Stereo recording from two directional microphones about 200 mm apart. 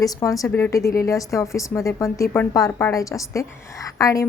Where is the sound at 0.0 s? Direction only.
15° left (ahead or behind).